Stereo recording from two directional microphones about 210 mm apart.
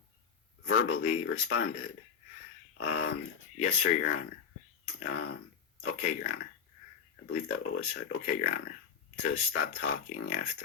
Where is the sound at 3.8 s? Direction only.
50° left (ahead or behind).